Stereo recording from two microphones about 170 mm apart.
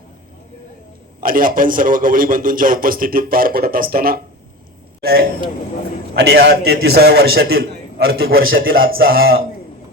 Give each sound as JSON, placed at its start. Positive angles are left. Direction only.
{"t": 1.2, "sound": "a man's voice", "side_deg": -55}
{"t": 6.1, "sound": "a man's voice", "side_deg": -75}